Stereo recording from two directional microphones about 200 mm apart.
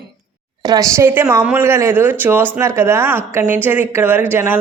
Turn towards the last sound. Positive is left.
turn(degrees=-10)  # may be behind; listen again after turning